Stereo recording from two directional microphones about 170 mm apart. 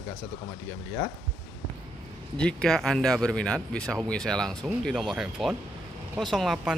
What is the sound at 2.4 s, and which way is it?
Speech, 5° left (ahead or behind).